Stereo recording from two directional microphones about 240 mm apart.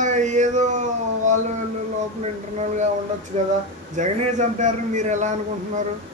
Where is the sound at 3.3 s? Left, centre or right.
Right.